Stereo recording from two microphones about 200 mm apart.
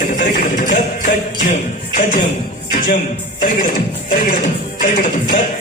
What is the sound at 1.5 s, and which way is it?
Music, 40° left (ahead or behind).